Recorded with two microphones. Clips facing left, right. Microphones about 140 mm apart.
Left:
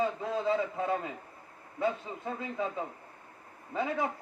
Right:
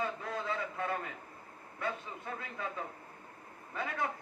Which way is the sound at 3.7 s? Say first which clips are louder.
Left 6 dB; 25° left (ahead or behind).